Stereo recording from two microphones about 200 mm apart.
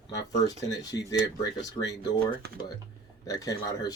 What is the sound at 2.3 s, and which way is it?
Speech, 45° right (ahead or behind).